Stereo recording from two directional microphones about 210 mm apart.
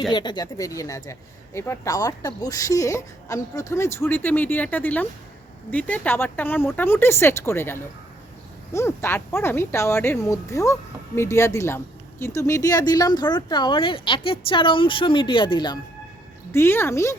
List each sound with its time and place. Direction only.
0.1 s speech: 20° left (ahead or behind)